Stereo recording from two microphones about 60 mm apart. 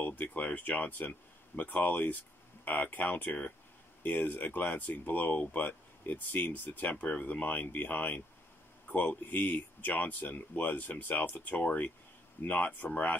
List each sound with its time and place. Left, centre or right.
0.0 s speech: left